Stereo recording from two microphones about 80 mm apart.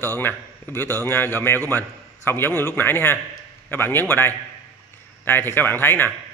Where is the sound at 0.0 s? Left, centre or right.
Left.